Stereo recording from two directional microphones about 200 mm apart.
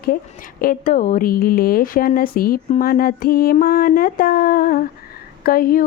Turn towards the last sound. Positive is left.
turn(degrees=45)  # may be behind; listen again after turning